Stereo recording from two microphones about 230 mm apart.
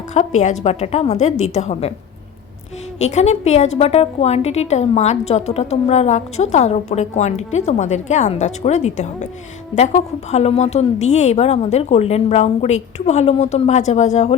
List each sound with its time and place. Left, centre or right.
0.1 s a woman's voice: left
3.0 s a woman's voice: left